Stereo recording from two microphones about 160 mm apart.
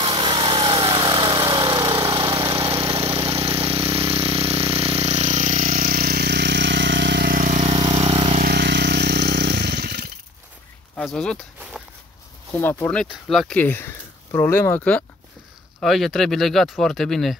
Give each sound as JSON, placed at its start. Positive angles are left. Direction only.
{"t": 0.0, "sound": "vehicle", "side_deg": -30}
{"t": 8.5, "sound": "chainsaw", "side_deg": -90}
{"t": 11.0, "sound": "speech", "side_deg": 5}
{"t": 12.5, "sound": "speech", "side_deg": 15}
{"t": 13.0, "sound": "speech", "side_deg": 0}
{"t": 13.6, "sound": "speech", "side_deg": 15}